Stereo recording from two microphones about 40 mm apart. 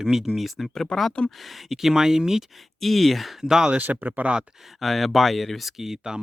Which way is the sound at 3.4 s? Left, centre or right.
Centre.